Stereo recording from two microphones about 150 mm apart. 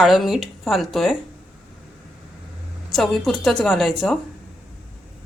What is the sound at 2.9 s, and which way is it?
A woman's voice, centre (ahead or behind).